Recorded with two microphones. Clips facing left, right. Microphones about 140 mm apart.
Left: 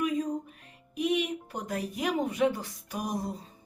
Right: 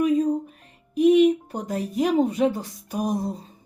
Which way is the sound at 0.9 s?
40° right (ahead or behind).